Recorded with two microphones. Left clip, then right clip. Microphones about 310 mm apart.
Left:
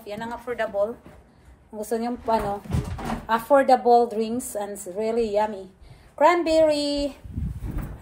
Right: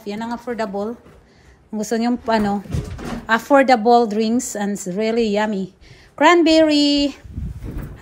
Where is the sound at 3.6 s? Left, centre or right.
Right.